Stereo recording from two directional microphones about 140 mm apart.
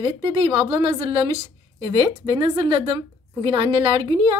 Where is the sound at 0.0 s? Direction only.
35° right (ahead or behind).